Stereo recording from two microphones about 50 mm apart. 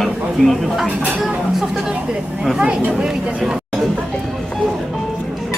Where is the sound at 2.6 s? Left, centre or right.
Centre.